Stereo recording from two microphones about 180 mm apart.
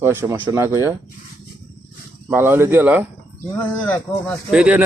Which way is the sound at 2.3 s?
15° right (ahead or behind).